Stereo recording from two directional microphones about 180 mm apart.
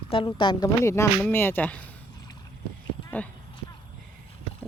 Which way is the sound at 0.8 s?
15° left (ahead or behind).